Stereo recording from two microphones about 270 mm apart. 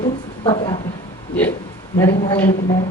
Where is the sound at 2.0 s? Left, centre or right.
Centre.